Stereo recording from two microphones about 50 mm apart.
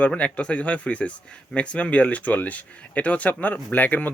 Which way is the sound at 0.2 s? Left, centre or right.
Left.